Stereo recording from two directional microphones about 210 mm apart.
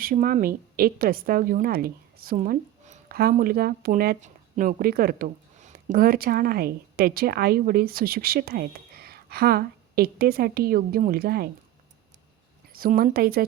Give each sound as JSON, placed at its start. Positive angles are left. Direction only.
{"t": 0.0, "sound": "speech", "side_deg": -40}
{"t": 12.7, "sound": "speech", "side_deg": -45}